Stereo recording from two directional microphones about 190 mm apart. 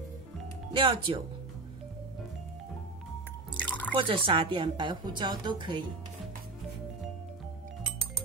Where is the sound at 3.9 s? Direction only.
25° right (ahead or behind).